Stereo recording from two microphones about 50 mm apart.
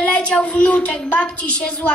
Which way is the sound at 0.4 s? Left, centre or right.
Left.